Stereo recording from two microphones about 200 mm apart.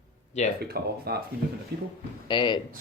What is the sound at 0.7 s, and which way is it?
Speech, 50° right (ahead or behind).